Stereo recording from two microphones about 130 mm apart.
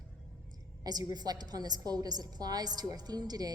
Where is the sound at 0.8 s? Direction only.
30° right (ahead or behind).